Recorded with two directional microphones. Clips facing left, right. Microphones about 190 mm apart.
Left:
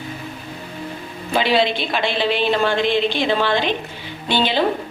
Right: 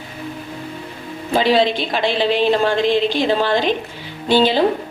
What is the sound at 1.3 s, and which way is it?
Speech, 40° right (ahead or behind).